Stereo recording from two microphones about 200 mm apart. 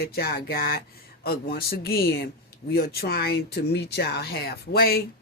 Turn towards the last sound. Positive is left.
turn(degrees=50)  # may be behind; listen again after turning